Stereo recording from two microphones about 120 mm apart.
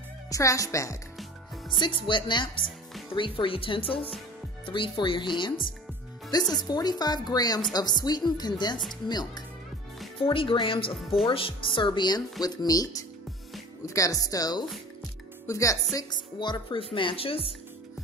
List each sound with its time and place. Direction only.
0.3 s speech: 25° left (ahead or behind)
1.8 s speech: 45° left (ahead or behind)
10.2 s speech: 45° left (ahead or behind); by 15.8 s 25° left (ahead or behind)
16.0 s speech: 40° left (ahead or behind)